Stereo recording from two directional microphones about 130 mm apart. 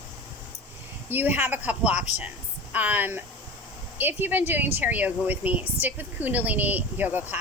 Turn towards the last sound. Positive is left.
turn(degrees=-15)  # may be behind; listen again after turning